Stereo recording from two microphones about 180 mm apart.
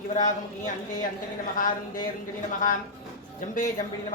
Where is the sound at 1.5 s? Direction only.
50° left (ahead or behind).